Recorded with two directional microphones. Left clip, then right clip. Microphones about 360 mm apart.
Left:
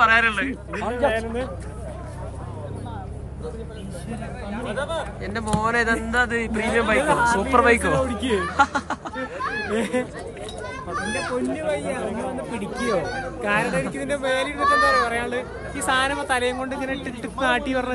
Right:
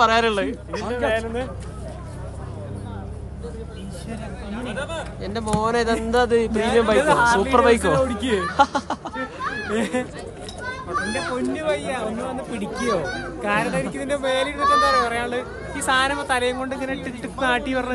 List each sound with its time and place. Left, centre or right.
0.0 s speech: centre
4.6 s speech: centre
5.2 s speech: centre
9.4 s speech: left
9.7 s speech: centre
13.4 s speech: centre